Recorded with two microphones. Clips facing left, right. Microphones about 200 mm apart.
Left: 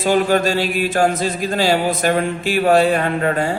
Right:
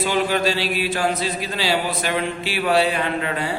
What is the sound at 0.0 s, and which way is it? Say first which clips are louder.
Mantra: left 5 dB; 45° left (ahead or behind).